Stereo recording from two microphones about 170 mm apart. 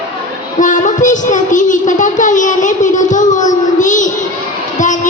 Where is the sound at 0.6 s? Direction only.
45° left (ahead or behind).